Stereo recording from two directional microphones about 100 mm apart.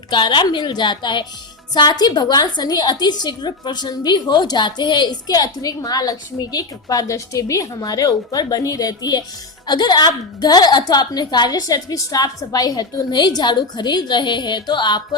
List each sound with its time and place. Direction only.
0.1 s a woman's voice: 50° left (ahead or behind)